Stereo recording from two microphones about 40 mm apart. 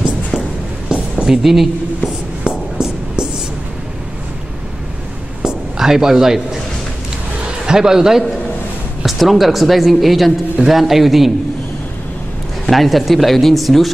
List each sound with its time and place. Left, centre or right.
0.8 s a sound: right
1.3 s speech: centre
2.4 s a sound: right
5.8 s a man's voice: centre
7.6 s a man's voice: centre
12.6 s speech: centre